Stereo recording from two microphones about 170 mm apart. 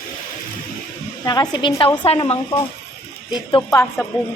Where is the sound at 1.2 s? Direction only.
25° left (ahead or behind).